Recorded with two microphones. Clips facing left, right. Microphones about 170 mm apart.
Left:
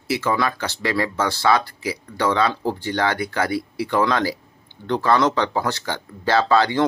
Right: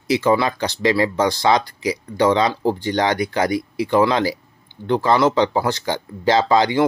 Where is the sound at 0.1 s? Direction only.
20° right (ahead or behind).